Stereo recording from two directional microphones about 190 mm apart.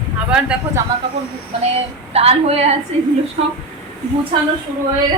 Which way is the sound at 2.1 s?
35° right (ahead or behind).